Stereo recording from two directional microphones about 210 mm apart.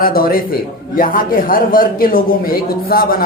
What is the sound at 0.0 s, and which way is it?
A man's voice, 45° left (ahead or behind).